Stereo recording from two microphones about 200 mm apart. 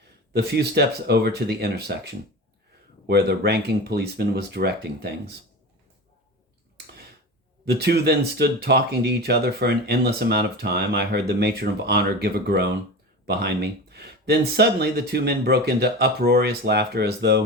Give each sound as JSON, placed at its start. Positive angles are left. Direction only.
{"t": 0.3, "sound": "speech", "side_deg": -55}
{"t": 7.6, "sound": "speech", "side_deg": -50}